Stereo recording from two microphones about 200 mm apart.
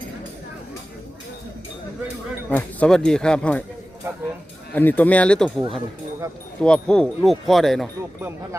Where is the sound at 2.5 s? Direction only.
5° left (ahead or behind).